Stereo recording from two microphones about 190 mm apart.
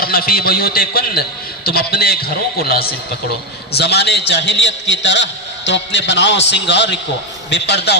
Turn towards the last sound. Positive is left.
turn(degrees=60)  # may be behind; listen again after turning